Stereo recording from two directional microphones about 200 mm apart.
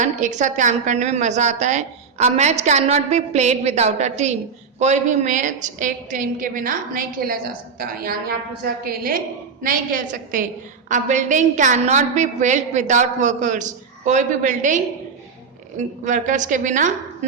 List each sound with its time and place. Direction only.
0.0 s a woman's voice: 35° right (ahead or behind)
15.8 s a woman's voice: 40° right (ahead or behind)